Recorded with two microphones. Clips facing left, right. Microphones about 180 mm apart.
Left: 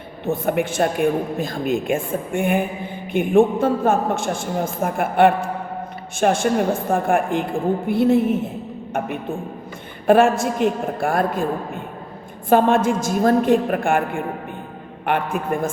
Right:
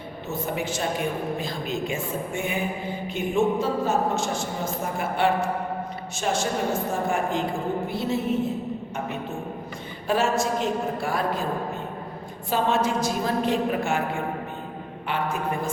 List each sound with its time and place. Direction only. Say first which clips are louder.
0.3 s a man's voice: left 8 dB; 55° left (ahead or behind)
10.1 s speech: left 8 dB; 55° left (ahead or behind)
12.5 s a man's voice: left 8 dB; 55° left (ahead or behind)